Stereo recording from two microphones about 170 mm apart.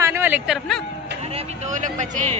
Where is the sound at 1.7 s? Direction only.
45° right (ahead or behind).